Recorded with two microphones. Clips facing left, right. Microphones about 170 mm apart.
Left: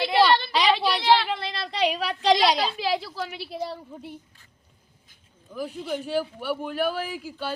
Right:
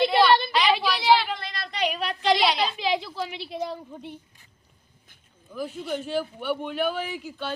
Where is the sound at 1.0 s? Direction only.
5° right (ahead or behind).